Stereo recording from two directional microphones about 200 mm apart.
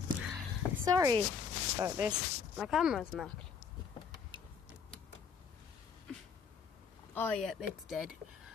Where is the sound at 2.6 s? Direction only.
Centre (ahead or behind).